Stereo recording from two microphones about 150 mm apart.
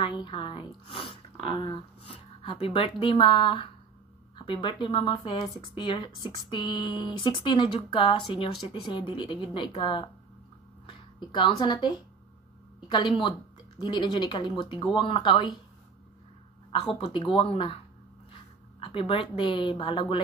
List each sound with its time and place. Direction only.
0.0 s speech: 35° left (ahead or behind)
2.0 s speech: 40° left (ahead or behind)
16.7 s speech: 40° left (ahead or behind)
18.8 s speech: 35° left (ahead or behind)